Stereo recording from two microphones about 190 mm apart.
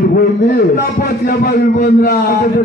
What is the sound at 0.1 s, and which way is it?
A man's voice, 50° left (ahead or behind).